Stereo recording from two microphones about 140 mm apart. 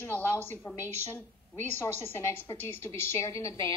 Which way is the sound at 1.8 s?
15° left (ahead or behind).